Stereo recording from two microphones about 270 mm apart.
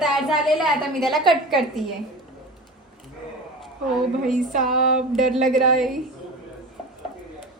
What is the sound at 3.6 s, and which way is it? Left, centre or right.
A woman's voice, centre.